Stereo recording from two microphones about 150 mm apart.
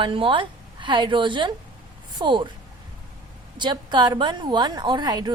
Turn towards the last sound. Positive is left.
turn(degrees=-25)  # may be behind; listen again after turning